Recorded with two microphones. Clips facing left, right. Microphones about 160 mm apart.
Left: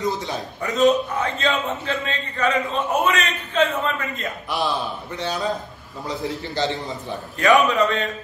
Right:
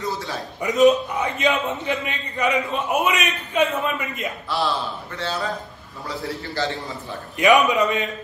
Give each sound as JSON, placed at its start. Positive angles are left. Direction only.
{"t": 0.6, "sound": "a man's voice", "side_deg": -15}
{"t": 4.5, "sound": "a man's voice", "side_deg": 15}
{"t": 7.3, "sound": "a man's voice", "side_deg": -15}